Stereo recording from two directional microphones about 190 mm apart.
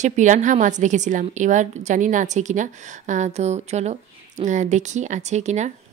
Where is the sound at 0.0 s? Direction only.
40° right (ahead or behind).